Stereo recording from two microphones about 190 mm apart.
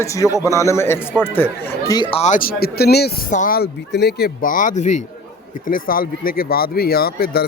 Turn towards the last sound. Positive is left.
turn(degrees=55)  # may be behind; listen again after turning